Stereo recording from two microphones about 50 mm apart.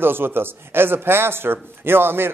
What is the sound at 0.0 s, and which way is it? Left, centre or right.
Speech, right.